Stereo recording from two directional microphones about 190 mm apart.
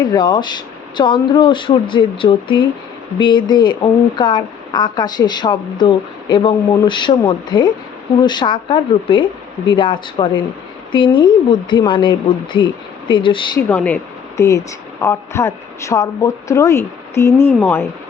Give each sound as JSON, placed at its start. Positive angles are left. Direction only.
{"t": 0.0, "sound": "speech", "side_deg": 20}
{"t": 13.7, "sound": "speech", "side_deg": 5}